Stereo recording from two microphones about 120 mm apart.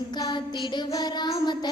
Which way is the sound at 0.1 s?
40° left (ahead or behind).